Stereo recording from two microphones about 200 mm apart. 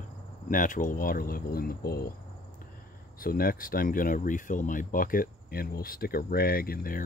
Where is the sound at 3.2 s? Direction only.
45° left (ahead or behind).